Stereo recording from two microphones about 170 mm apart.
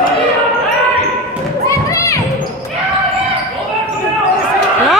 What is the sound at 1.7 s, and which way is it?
Children playing, 20° left (ahead or behind).